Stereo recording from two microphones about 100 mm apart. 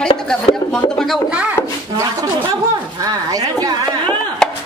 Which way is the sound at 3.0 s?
40° right (ahead or behind).